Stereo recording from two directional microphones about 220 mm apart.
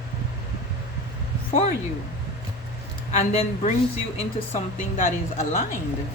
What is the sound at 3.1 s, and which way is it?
A woman's voice, 30° left (ahead or behind).